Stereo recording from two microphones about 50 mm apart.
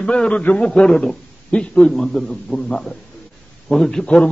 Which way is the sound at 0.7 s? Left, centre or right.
Centre.